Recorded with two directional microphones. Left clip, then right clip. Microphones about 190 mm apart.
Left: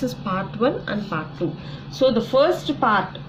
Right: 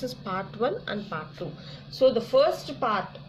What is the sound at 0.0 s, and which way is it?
A woman's voice, 20° right (ahead or behind).